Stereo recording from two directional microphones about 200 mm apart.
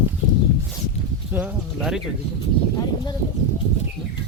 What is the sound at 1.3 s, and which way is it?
Speech, 5° right (ahead or behind).